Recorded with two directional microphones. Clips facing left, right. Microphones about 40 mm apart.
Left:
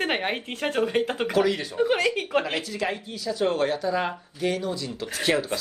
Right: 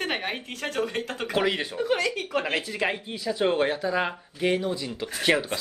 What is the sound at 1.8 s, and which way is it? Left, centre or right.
Speech, left.